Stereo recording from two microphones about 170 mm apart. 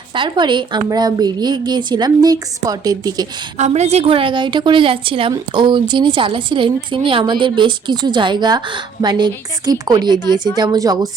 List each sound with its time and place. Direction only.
0.1 s a woman's voice: 30° right (ahead or behind)
3.6 s a woman's voice: 40° right (ahead or behind); by 11.1 s 20° right (ahead or behind)